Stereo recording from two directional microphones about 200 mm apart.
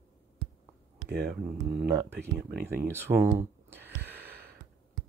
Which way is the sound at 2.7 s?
10° right (ahead or behind).